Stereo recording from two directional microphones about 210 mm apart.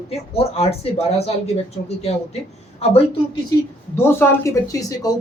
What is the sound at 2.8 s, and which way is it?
Speech, 30° left (ahead or behind).